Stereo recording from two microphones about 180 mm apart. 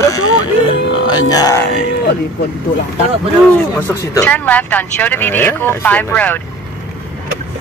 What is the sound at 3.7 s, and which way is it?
Speech, 10° left (ahead or behind).